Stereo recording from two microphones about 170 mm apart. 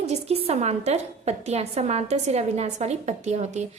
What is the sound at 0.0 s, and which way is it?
A woman's voice, 40° right (ahead or behind).